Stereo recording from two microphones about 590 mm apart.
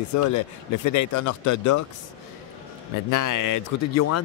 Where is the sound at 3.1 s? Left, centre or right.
Left.